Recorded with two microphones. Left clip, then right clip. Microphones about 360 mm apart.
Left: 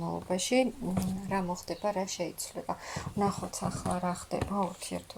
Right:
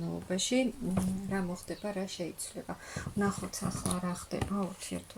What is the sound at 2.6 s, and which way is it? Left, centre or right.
Speech, left.